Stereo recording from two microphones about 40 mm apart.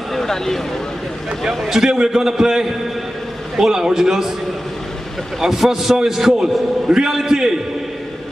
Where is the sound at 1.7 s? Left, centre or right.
Centre.